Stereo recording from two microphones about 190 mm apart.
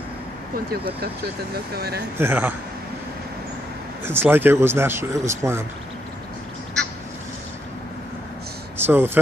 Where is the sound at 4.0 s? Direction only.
10° right (ahead or behind).